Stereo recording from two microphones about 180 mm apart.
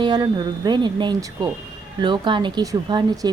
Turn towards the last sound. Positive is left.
turn(degrees=-25)  # may be behind; listen again after turning